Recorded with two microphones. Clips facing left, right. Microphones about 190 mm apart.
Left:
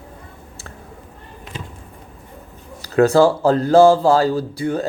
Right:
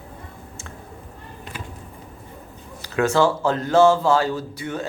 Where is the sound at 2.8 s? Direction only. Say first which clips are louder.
Left 6 dB; 35° left (ahead or behind).